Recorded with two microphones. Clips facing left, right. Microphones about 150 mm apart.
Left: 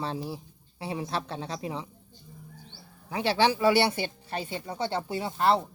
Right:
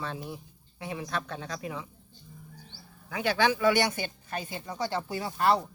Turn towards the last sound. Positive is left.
turn(degrees=25)  # may be behind; listen again after turning